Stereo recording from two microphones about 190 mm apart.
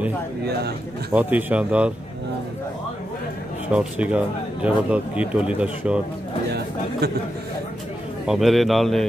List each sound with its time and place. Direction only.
0.5 s a man's voice: 60° right (ahead or behind)
1.1 s speech: 5° right (ahead or behind)
3.6 s speech: 5° right (ahead or behind)
8.3 s a man's voice: centre (ahead or behind)